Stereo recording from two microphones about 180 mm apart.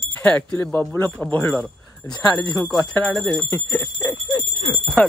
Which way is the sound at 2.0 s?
20° left (ahead or behind).